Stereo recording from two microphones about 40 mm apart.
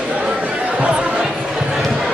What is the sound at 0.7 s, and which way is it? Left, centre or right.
Chatter, right.